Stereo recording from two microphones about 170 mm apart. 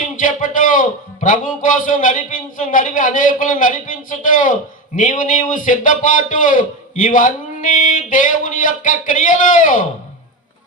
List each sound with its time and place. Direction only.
0.2 s a man's voice: 50° left (ahead or behind)